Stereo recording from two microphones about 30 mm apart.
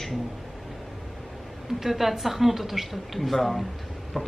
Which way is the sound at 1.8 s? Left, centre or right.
Centre.